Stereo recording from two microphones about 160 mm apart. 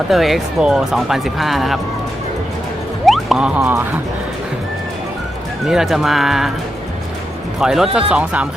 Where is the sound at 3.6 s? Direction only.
15° right (ahead or behind).